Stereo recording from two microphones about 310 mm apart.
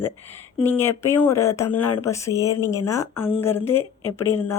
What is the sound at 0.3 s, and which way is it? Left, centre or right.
A woman's voice, centre.